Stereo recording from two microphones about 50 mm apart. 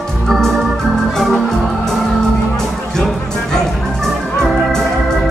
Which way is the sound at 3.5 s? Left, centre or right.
Centre.